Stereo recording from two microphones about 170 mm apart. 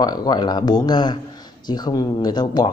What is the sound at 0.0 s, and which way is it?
A man's voice, 25° left (ahead or behind).